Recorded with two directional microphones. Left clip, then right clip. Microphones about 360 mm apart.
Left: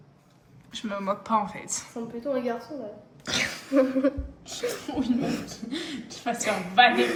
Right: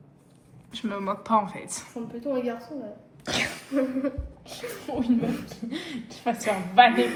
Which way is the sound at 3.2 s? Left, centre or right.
Centre.